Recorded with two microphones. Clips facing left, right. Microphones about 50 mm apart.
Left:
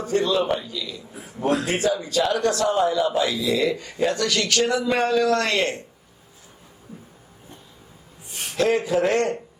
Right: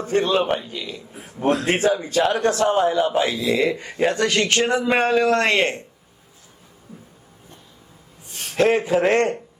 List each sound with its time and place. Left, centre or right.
0.0 s speech: right
8.5 s speech: right